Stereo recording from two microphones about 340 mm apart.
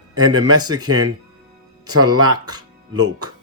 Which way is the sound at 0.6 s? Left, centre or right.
Centre.